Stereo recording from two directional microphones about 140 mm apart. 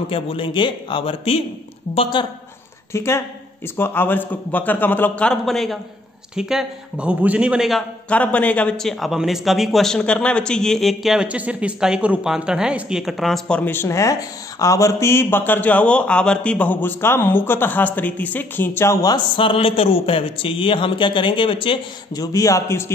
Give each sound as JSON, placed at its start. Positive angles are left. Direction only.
{"t": 0.0, "sound": "speech", "side_deg": 40}
{"t": 2.9, "sound": "a man's voice", "side_deg": 20}
{"t": 8.1, "sound": "a man's voice", "side_deg": 10}
{"t": 22.2, "sound": "a man's voice", "side_deg": 25}